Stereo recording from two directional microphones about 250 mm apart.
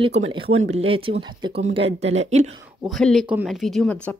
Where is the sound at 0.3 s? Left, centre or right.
Centre.